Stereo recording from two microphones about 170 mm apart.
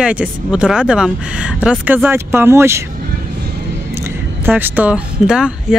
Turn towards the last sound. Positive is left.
turn(degrees=-5)  # may be behind; listen again after turning